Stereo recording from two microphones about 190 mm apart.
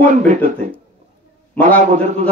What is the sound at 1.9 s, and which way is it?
Speech, 35° right (ahead or behind).